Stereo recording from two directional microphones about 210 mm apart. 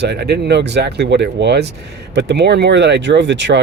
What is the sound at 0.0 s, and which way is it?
Speech, 50° right (ahead or behind).